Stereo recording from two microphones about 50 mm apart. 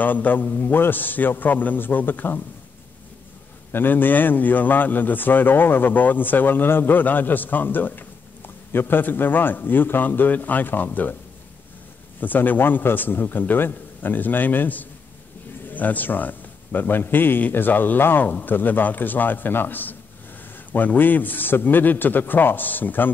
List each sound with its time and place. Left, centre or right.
0.0 s a man's voice: left
3.7 s a man's voice: left
12.2 s a man's voice: left